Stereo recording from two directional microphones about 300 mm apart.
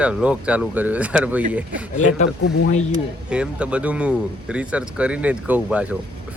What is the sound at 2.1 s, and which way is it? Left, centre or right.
Speech, left.